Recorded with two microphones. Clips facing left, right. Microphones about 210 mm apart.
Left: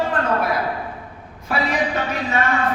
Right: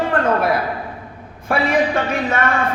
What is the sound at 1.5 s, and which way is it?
Speech, 55° right (ahead or behind).